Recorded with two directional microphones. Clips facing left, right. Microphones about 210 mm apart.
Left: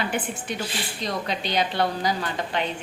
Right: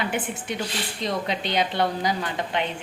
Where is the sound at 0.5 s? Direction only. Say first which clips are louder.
Right 1 dB; 5° left (ahead or behind).